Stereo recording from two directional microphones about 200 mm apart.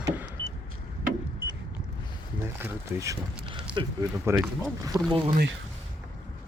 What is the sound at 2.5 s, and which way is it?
Speech, 10° right (ahead or behind).